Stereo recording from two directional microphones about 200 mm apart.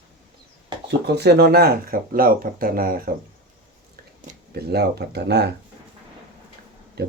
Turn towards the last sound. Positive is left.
turn(degrees=-55)  # may be behind; listen again after turning